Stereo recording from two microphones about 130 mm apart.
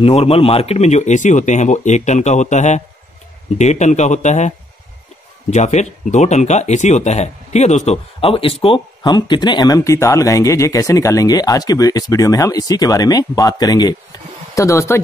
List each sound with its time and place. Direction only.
0.0 s speech: 50° left (ahead or behind); by 15.0 s 25° left (ahead or behind)